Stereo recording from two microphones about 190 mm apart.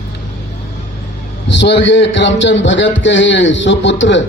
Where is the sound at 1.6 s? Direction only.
70° left (ahead or behind).